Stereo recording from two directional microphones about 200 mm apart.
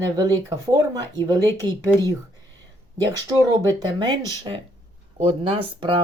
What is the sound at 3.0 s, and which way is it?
Speech, 20° right (ahead or behind).